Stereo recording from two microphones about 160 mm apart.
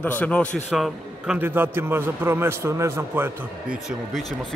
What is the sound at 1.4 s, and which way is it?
A man's voice, 10° right (ahead or behind).